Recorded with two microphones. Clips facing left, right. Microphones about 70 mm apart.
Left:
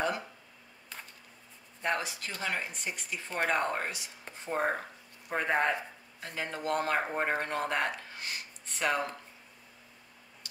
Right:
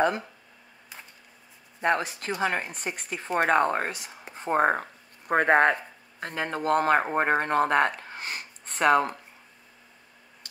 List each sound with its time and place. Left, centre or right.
1.8 s a woman's voice: right